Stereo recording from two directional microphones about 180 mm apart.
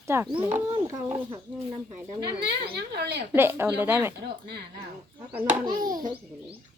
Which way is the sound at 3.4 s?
15° right (ahead or behind).